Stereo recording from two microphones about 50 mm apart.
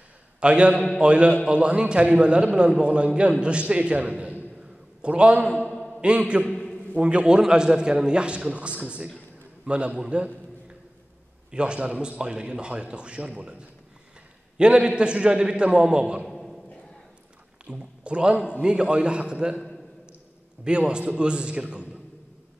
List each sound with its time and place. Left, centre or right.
0.4 s a man's voice: right
5.7 s mantra: centre
6.1 s a man's voice: right
11.5 s a man's voice: right
16.3 s a sound: centre
17.6 s a man's voice: right
20.6 s a man's voice: right